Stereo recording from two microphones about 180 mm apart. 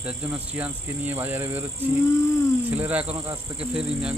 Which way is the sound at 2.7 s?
10° right (ahead or behind).